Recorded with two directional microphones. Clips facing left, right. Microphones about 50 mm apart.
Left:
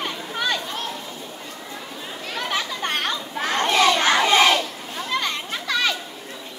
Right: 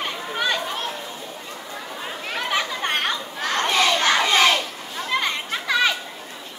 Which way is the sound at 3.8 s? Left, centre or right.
Centre.